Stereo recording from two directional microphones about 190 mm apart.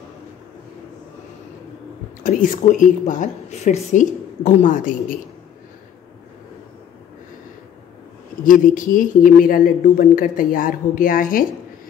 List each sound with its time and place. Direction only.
2.2 s speech: 45° left (ahead or behind)
8.5 s speech: 45° left (ahead or behind)